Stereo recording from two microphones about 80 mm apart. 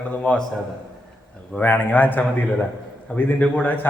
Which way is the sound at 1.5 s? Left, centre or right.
Left.